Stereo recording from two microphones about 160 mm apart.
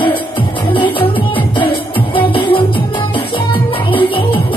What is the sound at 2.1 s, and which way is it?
Music, 35° left (ahead or behind).